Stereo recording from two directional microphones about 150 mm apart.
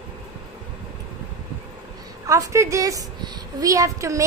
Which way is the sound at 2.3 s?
20° right (ahead or behind).